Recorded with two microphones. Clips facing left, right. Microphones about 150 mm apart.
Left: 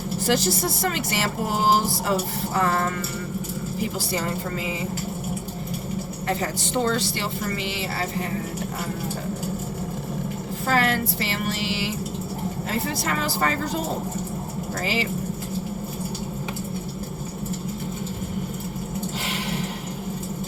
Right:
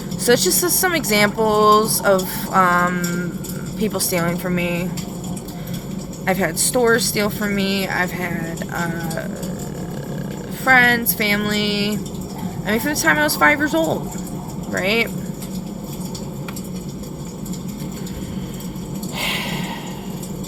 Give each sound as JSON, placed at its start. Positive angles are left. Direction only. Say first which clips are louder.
{"t": 0.3, "sound": "speech", "louder": "right 8 dB", "side_deg": -75}
{"t": 6.2, "sound": "speech", "louder": "right 8 dB", "side_deg": -65}
{"t": 10.7, "sound": "speech", "louder": "right 5 dB", "side_deg": -70}
{"t": 19.2, "sound": "a sound", "louder": "right 2 dB", "side_deg": -65}